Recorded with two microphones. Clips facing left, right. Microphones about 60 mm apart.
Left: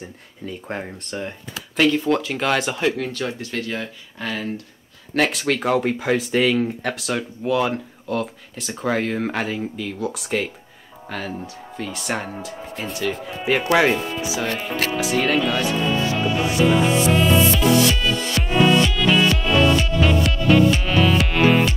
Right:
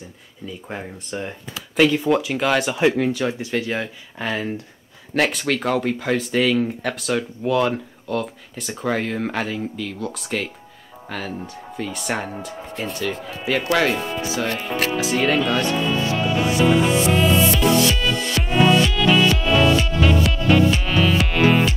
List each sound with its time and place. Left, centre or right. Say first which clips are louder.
1.1 s speech: even; centre
3.0 s speech: right 5 dB; centre
5.1 s speech: even; centre
14.4 s speech: right 1 dB; centre
16.2 s music: right 2 dB; centre